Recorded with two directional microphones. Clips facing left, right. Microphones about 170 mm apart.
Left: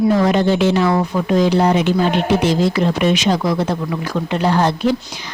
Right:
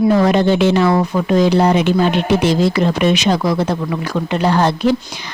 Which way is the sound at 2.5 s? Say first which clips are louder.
Right 1 dB; 70° right (ahead or behind).